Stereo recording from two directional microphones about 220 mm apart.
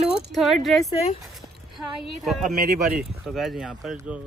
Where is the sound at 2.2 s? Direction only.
Centre (ahead or behind).